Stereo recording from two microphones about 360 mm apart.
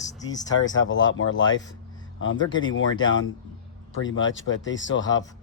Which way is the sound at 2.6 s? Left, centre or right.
Left.